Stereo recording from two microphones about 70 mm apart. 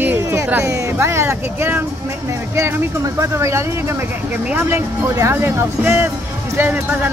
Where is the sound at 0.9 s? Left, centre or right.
Right.